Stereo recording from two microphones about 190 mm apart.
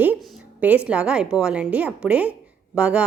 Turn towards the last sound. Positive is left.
turn(degrees=-5)  # may be behind; listen again after turning